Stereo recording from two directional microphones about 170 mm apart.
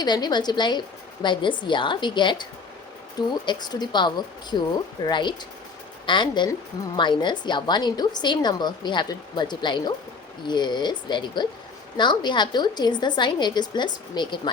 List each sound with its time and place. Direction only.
0.0 s a woman's voice: 25° left (ahead or behind)